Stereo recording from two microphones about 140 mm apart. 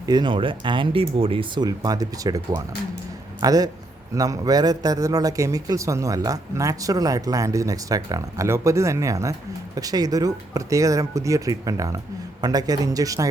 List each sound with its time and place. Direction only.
0.0 s speech: 30° right (ahead or behind)
3.4 s a man's voice: 25° right (ahead or behind)